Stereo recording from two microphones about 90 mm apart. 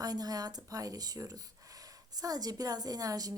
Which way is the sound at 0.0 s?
45° right (ahead or behind).